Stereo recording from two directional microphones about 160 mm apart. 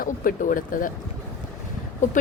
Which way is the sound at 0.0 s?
60° left (ahead or behind).